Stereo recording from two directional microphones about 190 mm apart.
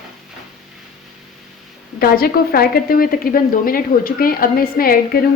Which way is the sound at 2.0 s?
50° left (ahead or behind).